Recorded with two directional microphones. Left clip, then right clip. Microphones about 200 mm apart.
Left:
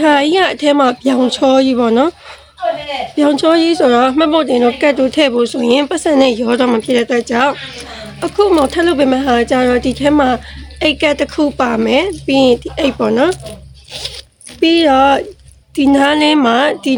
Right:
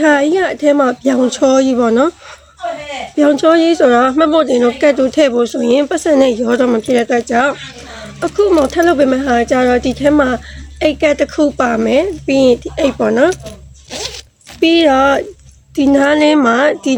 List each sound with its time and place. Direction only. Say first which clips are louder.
0.0 s speech: left 1 dB; 5° left (ahead or behind)
3.2 s speech: right 2 dB; 5° left (ahead or behind)
7.9 s a sound: even; 5° left (ahead or behind)
8.6 s speech: right 1 dB; 5° left (ahead or behind)